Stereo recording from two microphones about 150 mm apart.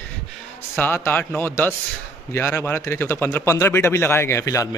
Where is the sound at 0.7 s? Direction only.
15° left (ahead or behind).